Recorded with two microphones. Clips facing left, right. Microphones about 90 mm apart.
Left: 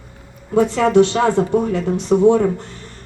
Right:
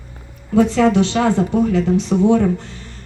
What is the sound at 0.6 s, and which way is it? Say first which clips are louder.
Speech: left 1 dB; 45° left (ahead or behind).